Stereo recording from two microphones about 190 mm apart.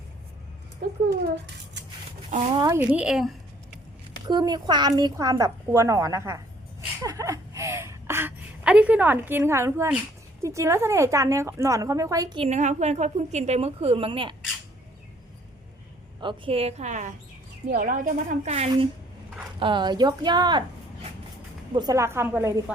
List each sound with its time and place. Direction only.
2.3 s a woman's voice: 35° right (ahead or behind)
2.6 s a woman's voice: 15° right (ahead or behind)
4.3 s a woman's voice: 20° right (ahead or behind)
7.0 s a sound: 15° right (ahead or behind)
10.4 s a woman's voice: 15° right (ahead or behind)
12.4 s a woman's voice: 40° right (ahead or behind)
16.2 s a woman's voice: 30° right (ahead or behind)
19.5 s a woman's voice: 25° right (ahead or behind)